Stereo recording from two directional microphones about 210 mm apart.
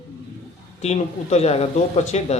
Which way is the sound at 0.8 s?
30° left (ahead or behind).